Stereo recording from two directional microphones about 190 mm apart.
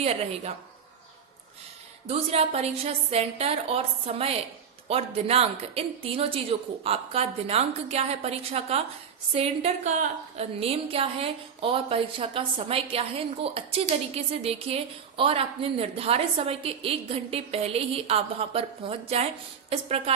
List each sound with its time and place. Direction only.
0.0 s a woman's voice: 35° right (ahead or behind)
2.0 s a woman's voice: 35° right (ahead or behind)